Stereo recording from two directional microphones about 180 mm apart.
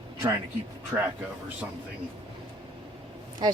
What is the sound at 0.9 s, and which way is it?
Speech, 10° right (ahead or behind).